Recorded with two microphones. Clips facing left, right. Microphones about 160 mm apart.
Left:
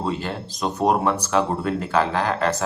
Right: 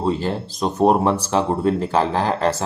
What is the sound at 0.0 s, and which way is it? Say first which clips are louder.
Speech: right 5 dB; 35° right (ahead or behind).